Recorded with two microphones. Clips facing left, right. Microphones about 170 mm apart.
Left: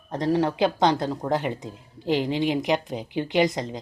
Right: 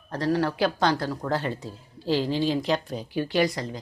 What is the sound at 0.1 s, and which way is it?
Speech, 20° left (ahead or behind).